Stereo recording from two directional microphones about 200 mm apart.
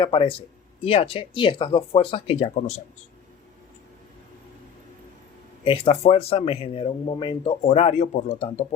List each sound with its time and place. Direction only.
0.0 s speech: 25° left (ahead or behind)
5.6 s speech: 25° left (ahead or behind)